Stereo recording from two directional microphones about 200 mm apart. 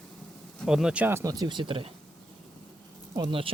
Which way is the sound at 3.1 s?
25° right (ahead or behind).